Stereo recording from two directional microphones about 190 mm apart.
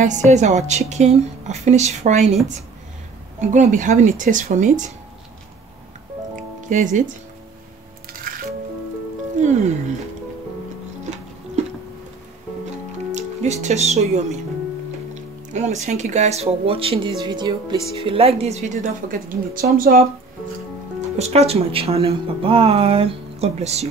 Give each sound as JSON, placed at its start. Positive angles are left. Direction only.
{"t": 0.0, "sound": "speech", "side_deg": -40}
{"t": 3.3, "sound": "speech", "side_deg": -40}
{"t": 6.3, "sound": "music", "side_deg": -40}
{"t": 9.4, "sound": "speech", "side_deg": -40}
{"t": 13.1, "sound": "speech", "side_deg": -35}
{"t": 21.2, "sound": "speech", "side_deg": -35}